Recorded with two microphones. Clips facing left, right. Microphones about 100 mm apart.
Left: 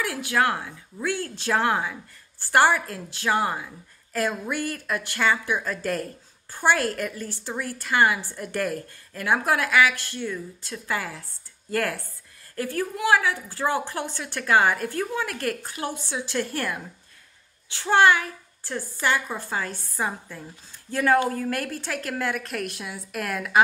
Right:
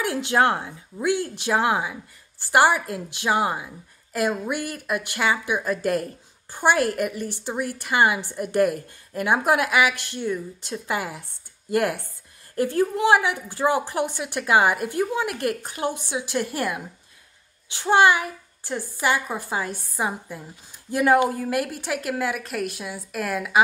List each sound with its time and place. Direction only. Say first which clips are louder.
0.0 s speech: right 3 dB; 25° right (ahead or behind); by 23.6 s 5° right (ahead or behind)